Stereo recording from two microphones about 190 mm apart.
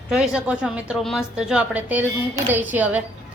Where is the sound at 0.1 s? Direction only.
5° right (ahead or behind).